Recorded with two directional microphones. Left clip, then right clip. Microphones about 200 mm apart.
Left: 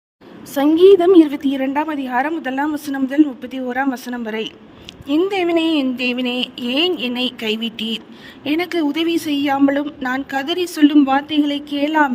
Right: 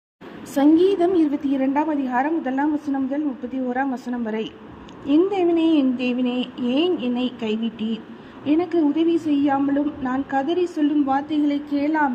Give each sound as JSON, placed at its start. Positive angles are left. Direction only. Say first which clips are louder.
{"t": 0.5, "sound": "a woman's voice", "louder": "left 6 dB", "side_deg": 45}